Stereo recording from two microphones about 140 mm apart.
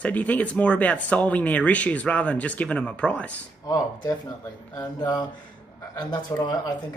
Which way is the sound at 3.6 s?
25° left (ahead or behind).